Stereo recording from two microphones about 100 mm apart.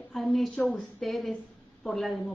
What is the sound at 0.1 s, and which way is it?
Speech, centre (ahead or behind).